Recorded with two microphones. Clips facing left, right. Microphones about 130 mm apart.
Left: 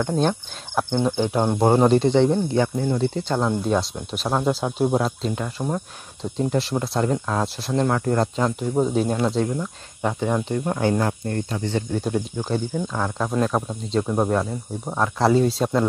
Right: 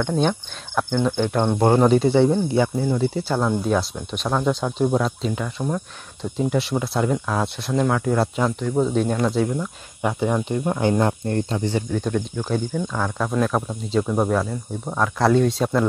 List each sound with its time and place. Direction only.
0.0 s speech: 5° left (ahead or behind)
0.8 s speech: 15° left (ahead or behind); by 5.4 s centre (ahead or behind)
5.6 s speech: 15° left (ahead or behind)
6.3 s speech: centre (ahead or behind)
8.5 s speech: 15° left (ahead or behind)
9.4 s speech: 5° right (ahead or behind); by 11.6 s 30° right (ahead or behind)
11.9 s speech: 10° left (ahead or behind)